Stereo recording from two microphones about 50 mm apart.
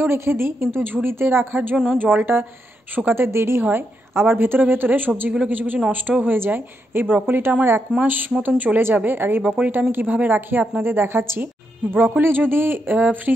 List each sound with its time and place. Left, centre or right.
0.0 s a woman's voice: right
3.1 s a woman's voice: right